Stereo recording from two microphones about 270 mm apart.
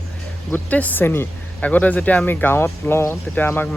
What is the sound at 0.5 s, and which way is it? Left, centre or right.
Speech, centre.